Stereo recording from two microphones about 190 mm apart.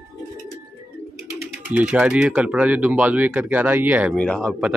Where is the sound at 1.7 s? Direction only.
5° right (ahead or behind).